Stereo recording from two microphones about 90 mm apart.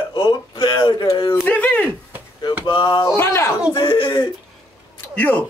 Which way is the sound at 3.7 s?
60° left (ahead or behind).